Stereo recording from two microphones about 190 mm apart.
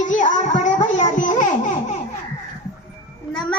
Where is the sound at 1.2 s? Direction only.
45° left (ahead or behind).